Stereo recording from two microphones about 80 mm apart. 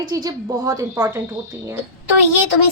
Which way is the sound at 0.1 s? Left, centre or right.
Right.